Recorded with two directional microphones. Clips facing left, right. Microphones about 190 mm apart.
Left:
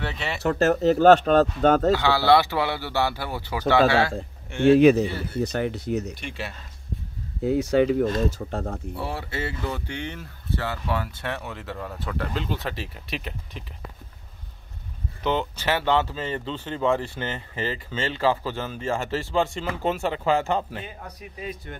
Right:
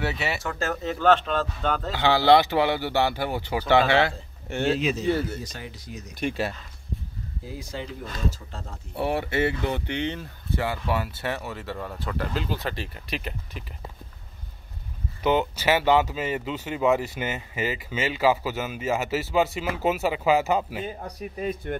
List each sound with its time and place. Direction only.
0.0 s speech: 5° right (ahead or behind)
0.4 s speech: 65° left (ahead or behind)
0.8 s speech: 40° left (ahead or behind)
2.0 s speech: 20° right (ahead or behind)
4.7 s speech: 60° left (ahead or behind)
6.1 s speech: 45° right (ahead or behind)
7.4 s speech: 70° left (ahead or behind)
8.9 s speech: 25° right (ahead or behind); by 13.7 s centre (ahead or behind)
15.2 s speech: 10° right (ahead or behind)
20.8 s speech: 40° right (ahead or behind)